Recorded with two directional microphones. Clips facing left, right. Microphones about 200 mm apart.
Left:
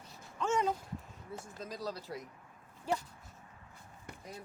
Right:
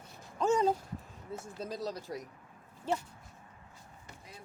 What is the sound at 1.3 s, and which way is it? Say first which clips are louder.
Speech: right 4 dB; 25° right (ahead or behind).